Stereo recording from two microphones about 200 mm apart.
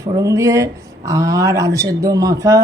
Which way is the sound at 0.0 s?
15° right (ahead or behind).